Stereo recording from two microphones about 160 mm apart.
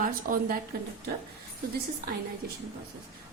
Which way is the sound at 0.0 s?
60° right (ahead or behind).